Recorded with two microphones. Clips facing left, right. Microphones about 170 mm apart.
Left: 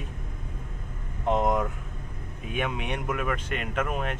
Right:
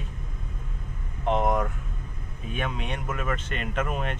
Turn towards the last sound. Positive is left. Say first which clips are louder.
# even
turn(degrees=5)  # may be behind; listen again after turning